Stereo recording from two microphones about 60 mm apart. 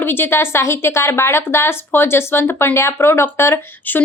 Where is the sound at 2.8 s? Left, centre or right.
Left.